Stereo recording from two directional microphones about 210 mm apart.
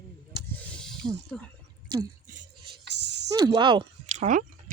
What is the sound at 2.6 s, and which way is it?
Music, 55° right (ahead or behind).